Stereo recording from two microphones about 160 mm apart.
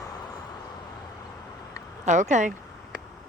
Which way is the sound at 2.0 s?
50° right (ahead or behind).